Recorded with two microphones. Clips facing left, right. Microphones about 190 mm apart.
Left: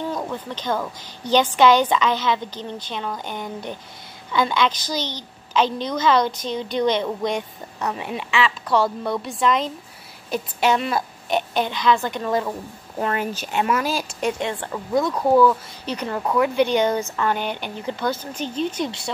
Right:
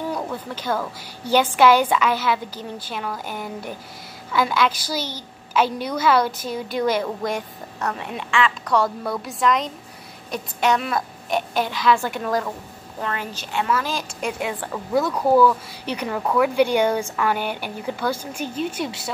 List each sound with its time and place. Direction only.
0.1 s a woman's voice: 10° right (ahead or behind)
13.0 s speech: 20° left (ahead or behind)
13.9 s a woman's voice: 5° right (ahead or behind)